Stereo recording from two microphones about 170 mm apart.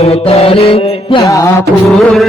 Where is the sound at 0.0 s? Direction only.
35° left (ahead or behind).